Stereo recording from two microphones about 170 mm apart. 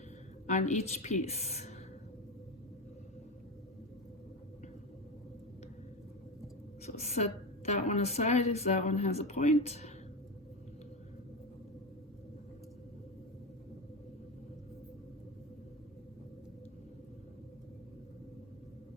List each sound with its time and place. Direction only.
0.4 s a woman's voice: 45° left (ahead or behind)
6.8 s a woman's voice: 40° left (ahead or behind)